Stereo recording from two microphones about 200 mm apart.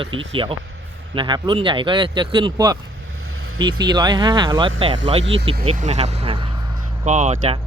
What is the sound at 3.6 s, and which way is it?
Speech, 20° right (ahead or behind).